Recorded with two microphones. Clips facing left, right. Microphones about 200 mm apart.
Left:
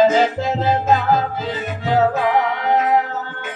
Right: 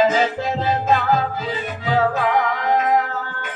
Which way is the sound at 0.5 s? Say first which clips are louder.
Left 2 dB; 25° left (ahead or behind).